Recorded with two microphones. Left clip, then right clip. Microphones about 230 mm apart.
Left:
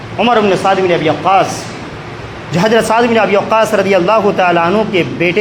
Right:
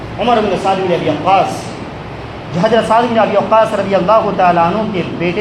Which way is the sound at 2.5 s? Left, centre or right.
Left.